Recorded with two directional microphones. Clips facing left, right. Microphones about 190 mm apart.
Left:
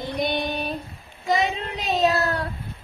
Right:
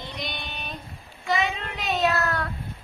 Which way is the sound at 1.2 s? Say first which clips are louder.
Left 3 dB; 40° left (ahead or behind).